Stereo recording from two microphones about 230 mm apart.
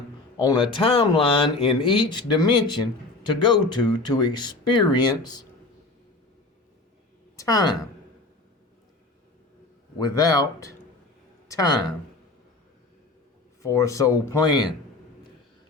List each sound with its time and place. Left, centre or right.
0.3 s speech: centre
7.3 s speech: centre
10.0 s speech: centre
13.6 s speech: centre